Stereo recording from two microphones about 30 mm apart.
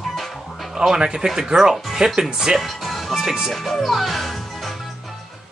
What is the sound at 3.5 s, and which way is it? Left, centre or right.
Speech, centre.